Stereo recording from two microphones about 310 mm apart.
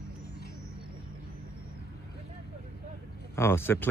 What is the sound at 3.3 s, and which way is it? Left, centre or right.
Speech, centre.